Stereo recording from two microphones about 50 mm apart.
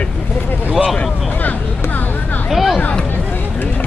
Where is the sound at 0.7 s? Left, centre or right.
Centre.